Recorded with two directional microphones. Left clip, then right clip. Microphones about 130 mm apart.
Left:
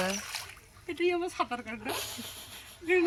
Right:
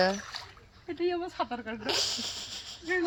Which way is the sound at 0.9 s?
10° right (ahead or behind).